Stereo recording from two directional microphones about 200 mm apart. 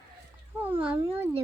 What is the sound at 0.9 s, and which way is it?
Speech, 10° right (ahead or behind).